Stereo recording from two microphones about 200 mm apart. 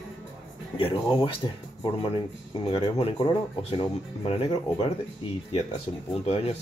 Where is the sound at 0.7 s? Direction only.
25° left (ahead or behind).